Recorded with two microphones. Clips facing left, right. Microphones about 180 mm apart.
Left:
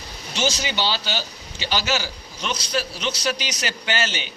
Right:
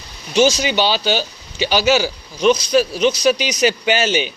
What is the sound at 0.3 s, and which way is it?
Speech, 15° right (ahead or behind).